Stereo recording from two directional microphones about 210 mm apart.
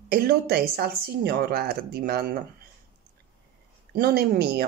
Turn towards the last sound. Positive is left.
turn(degrees=-50)  # may be behind; listen again after turning